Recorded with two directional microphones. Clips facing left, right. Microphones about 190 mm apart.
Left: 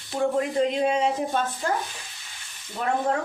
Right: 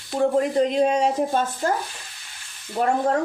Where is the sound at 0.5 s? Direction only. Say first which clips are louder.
Right 3 dB; 40° right (ahead or behind).